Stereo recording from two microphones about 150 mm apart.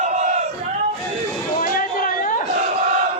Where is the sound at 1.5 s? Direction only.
65° left (ahead or behind).